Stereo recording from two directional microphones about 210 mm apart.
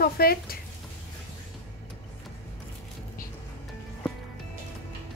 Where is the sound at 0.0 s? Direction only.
45° left (ahead or behind).